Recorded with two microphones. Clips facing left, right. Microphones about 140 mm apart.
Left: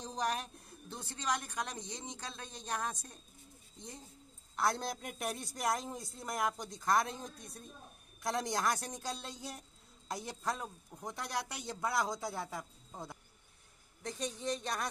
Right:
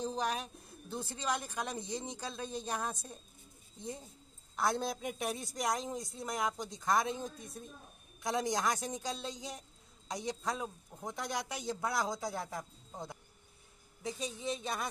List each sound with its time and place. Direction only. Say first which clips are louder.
0.0 s a woman's voice: right 1 dB; centre (ahead or behind)
4.6 s speech: right 1 dB; centre (ahead or behind)
14.0 s speech: even; 5° right (ahead or behind)